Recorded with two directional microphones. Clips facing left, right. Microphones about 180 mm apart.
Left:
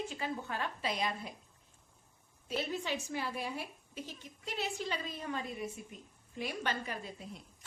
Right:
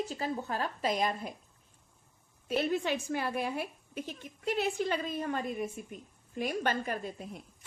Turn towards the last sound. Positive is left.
turn(degrees=-50)  # may be behind; listen again after turning